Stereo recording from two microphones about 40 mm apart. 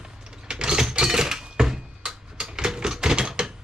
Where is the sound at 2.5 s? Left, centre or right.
Right.